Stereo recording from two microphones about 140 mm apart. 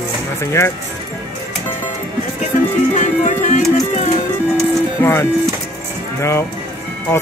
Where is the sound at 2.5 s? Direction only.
65° left (ahead or behind).